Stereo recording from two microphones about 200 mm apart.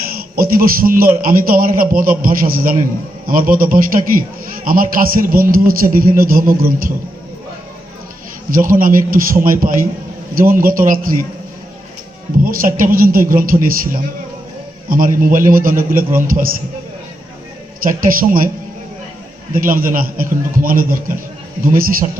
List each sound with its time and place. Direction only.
0.1 s a man's voice: 50° right (ahead or behind)
8.4 s a man's voice: 45° right (ahead or behind)
12.4 s a man's voice: 45° right (ahead or behind)
17.7 s a man's voice: 45° right (ahead or behind)
19.5 s a man's voice: 45° right (ahead or behind)